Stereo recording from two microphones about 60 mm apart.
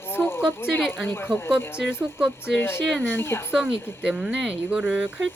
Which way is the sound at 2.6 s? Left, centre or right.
Left.